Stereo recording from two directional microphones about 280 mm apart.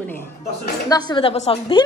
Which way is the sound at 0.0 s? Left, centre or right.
Centre.